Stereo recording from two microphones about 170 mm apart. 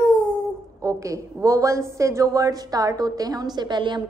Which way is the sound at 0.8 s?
20° right (ahead or behind).